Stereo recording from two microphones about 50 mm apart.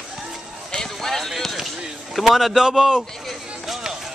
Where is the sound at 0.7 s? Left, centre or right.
Centre.